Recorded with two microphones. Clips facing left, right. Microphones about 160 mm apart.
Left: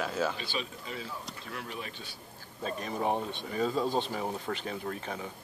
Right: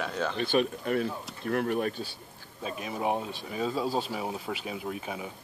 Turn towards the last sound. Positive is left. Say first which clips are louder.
# right 1 dB
turn(degrees=-10)  # may be behind; listen again after turning